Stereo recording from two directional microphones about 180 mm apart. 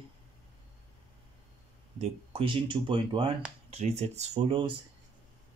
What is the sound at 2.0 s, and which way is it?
Speech, 30° right (ahead or behind).